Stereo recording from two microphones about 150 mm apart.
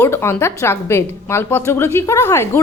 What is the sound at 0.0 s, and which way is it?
A woman's voice, 15° left (ahead or behind).